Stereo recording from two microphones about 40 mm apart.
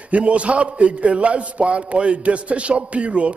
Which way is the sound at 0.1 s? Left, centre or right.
Right.